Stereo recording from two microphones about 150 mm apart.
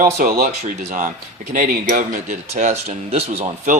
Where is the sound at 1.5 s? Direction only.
65° right (ahead or behind); by 3.8 s 45° right (ahead or behind).